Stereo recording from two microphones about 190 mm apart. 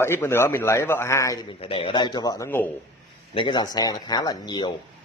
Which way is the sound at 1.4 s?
30° left (ahead or behind).